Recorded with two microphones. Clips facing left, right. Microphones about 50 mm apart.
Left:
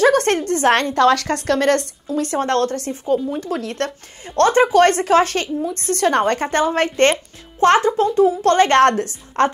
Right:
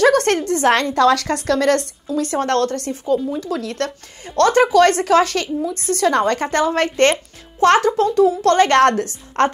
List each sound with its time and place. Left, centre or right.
0.0 s a sound: left
0.6 s a woman's voice: left
0.9 s a woman's voice: centre
2.3 s a woman's voice: left
3.1 s a woman's voice: left